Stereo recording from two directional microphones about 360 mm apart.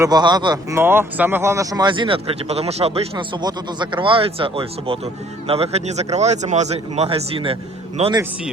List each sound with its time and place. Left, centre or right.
0.0 s speech: centre